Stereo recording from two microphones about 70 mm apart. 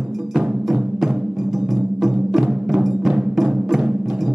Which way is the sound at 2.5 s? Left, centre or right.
Centre.